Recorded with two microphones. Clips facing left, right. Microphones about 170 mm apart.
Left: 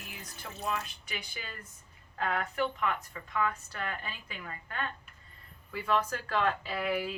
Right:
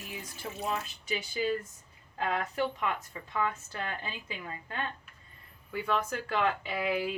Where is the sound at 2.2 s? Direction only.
25° right (ahead or behind).